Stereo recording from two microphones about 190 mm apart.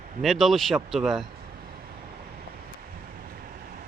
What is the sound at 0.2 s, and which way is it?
Speech, centre (ahead or behind).